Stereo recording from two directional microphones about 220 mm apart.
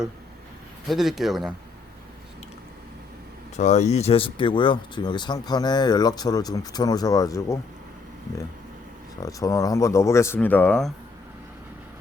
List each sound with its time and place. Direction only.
0.9 s speech: centre (ahead or behind)
3.6 s speech: 30° left (ahead or behind); by 7.6 s 15° left (ahead or behind)
9.2 s speech: 15° left (ahead or behind)